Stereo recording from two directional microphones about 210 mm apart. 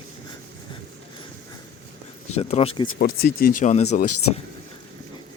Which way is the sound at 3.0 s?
40° left (ahead or behind).